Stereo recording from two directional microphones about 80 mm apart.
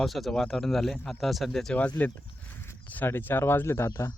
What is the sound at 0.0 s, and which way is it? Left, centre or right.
Speech, centre.